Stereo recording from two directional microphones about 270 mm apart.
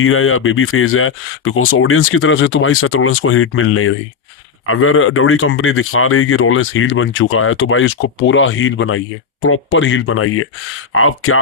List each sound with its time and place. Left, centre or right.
0.0 s speech: left